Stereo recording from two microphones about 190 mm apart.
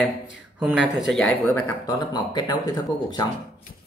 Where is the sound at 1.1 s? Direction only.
5° left (ahead or behind).